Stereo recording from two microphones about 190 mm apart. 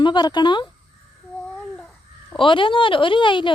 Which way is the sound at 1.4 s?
5° left (ahead or behind).